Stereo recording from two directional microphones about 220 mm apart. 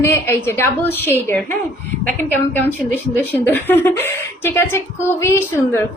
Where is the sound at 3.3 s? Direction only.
10° left (ahead or behind).